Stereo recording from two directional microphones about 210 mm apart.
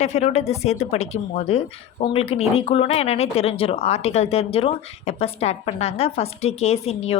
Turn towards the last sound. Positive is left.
turn(degrees=30)  # may be behind; listen again after turning